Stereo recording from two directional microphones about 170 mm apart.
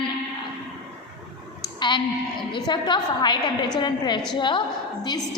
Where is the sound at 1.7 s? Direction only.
25° left (ahead or behind).